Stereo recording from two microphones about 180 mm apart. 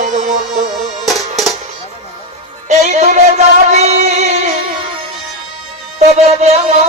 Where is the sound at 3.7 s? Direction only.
40° right (ahead or behind).